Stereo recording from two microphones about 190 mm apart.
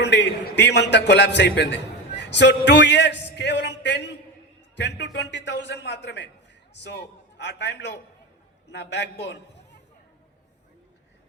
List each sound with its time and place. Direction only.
0.0 s a man's voice: 65° left (ahead or behind)